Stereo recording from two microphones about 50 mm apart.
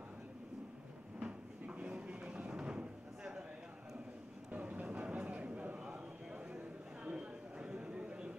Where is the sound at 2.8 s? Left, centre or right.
Centre.